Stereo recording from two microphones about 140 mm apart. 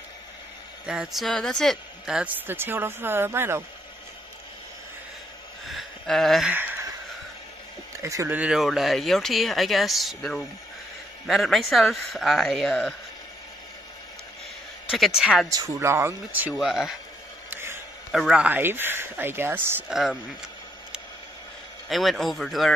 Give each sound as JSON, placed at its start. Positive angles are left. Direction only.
{"t": 0.8, "sound": "a woman's voice", "side_deg": -5}
{"t": 5.7, "sound": "gasp", "side_deg": 0}
{"t": 6.5, "sound": "speech", "side_deg": -15}
{"t": 8.0, "sound": "speech", "side_deg": -20}
{"t": 8.4, "sound": "speech", "side_deg": -5}
{"t": 14.9, "sound": "speech", "side_deg": 0}
{"t": 15.7, "sound": "a woman's voice", "side_deg": -20}
{"t": 16.5, "sound": "speech", "side_deg": 0}
{"t": 17.5, "sound": "a sound", "side_deg": -15}
{"t": 18.1, "sound": "a woman's voice", "side_deg": -5}
{"t": 19.9, "sound": "speech", "side_deg": 0}
{"t": 21.8, "sound": "speech", "side_deg": 0}